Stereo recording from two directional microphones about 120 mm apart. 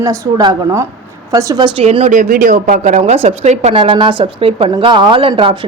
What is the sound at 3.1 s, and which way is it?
Speech, 65° right (ahead or behind).